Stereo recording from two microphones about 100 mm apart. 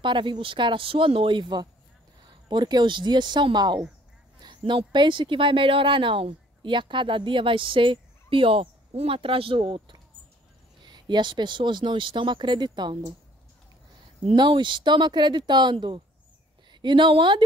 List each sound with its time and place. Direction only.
0.0 s speech: 55° right (ahead or behind)
14.3 s speech: 50° right (ahead or behind)